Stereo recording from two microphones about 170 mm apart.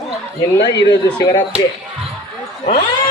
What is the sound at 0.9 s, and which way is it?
Speech, 25° left (ahead or behind).